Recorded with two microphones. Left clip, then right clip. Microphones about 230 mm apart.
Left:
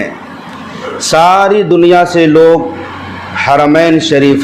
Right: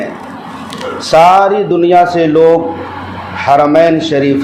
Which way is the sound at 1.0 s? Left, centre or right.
Left.